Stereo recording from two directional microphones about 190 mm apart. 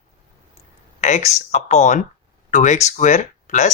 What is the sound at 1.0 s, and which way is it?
Speech, 40° left (ahead or behind).